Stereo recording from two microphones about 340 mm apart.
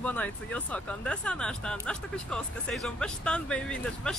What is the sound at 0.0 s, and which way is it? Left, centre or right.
Speech, centre.